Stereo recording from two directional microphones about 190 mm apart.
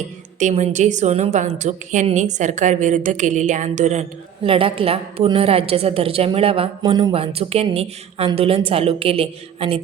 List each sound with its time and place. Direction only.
0.3 s a woman's voice: 40° right (ahead or behind)